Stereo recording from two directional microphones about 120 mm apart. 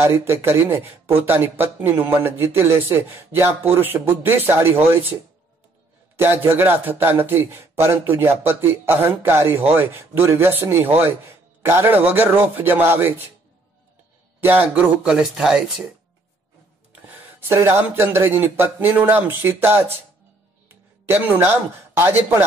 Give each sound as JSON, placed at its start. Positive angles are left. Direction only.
{"t": 0.0, "sound": "speech", "side_deg": -20}
{"t": 6.1, "sound": "a man's voice", "side_deg": -20}
{"t": 14.4, "sound": "speech", "side_deg": -15}
{"t": 16.9, "sound": "speech", "side_deg": -20}